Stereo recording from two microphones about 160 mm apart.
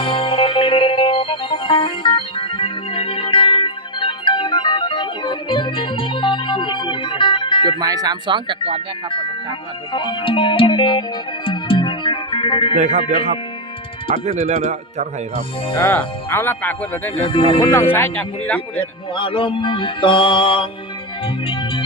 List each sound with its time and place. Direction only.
0.0 s music: 35° left (ahead or behind)
7.6 s speech: 25° right (ahead or behind)
9.9 s music: 30° left (ahead or behind)
12.7 s speech: 50° right (ahead or behind)
14.1 s speech: 45° right (ahead or behind)
15.8 s speech: 10° left (ahead or behind)
17.2 s music: 35° left (ahead or behind)
17.9 s speech: 10° left (ahead or behind)
19.1 s music: 30° left (ahead or behind)